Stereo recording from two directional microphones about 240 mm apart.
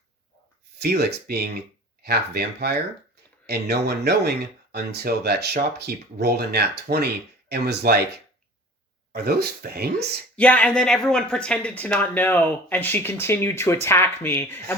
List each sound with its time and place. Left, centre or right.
0.8 s speech: right
9.1 s speech: right
10.3 s speech: centre